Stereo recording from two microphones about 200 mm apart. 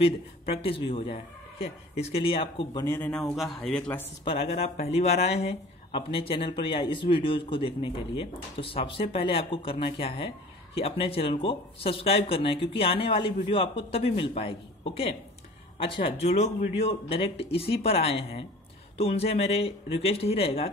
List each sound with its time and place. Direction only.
0.0 s speech: 30° left (ahead or behind); by 4.1 s 5° left (ahead or behind)
4.2 s speech: 25° left (ahead or behind)